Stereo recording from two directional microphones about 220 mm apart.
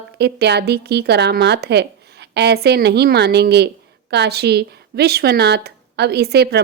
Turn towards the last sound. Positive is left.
turn(degrees=-45)  # may be behind; listen again after turning